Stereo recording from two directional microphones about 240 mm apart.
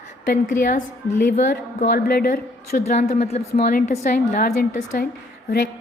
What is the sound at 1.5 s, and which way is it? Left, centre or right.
A woman's voice, left.